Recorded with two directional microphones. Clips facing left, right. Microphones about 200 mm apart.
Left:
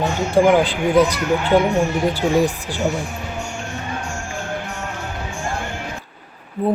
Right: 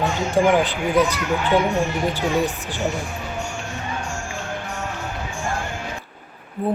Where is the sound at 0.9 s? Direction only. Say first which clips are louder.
Left 3 dB; 10° left (ahead or behind).